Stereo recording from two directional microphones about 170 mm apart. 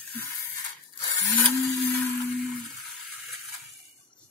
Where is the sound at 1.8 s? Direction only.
10° left (ahead or behind).